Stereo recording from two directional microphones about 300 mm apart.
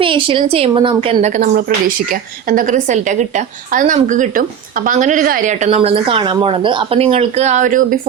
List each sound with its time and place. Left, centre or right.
0.0 s speech: centre